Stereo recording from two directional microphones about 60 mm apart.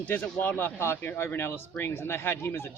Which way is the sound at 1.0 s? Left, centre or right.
Left.